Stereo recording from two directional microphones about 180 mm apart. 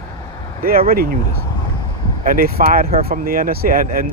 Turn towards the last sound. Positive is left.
turn(degrees=-50)  # may be behind; listen again after turning